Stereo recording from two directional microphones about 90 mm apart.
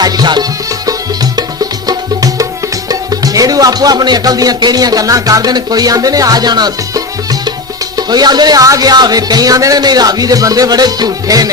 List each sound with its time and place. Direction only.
0.0 s music: 50° right (ahead or behind)
1.9 s music: 40° right (ahead or behind)
2.9 s speech: 45° right (ahead or behind)